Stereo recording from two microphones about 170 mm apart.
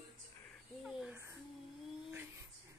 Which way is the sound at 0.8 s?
Centre (ahead or behind).